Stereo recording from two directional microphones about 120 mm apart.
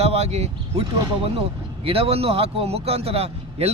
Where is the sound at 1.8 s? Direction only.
50° right (ahead or behind).